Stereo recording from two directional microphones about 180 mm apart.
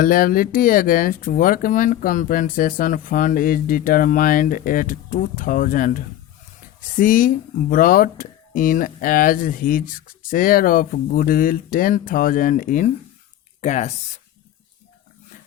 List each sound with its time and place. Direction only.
0.0 s speech: 50° left (ahead or behind)